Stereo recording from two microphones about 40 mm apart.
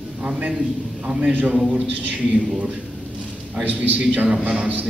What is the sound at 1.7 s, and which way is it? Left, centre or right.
Speech, right.